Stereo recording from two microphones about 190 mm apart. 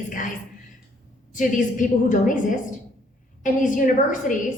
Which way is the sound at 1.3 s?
45° left (ahead or behind).